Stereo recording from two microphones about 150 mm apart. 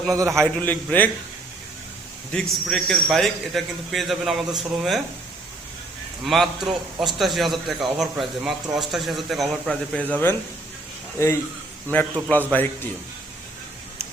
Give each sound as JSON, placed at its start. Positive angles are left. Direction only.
{"t": 0.1, "sound": "a man's voice", "side_deg": -20}
{"t": 0.6, "sound": "speech", "side_deg": 10}
{"t": 2.3, "sound": "a man's voice", "side_deg": 5}
{"t": 6.2, "sound": "a man's voice", "side_deg": 0}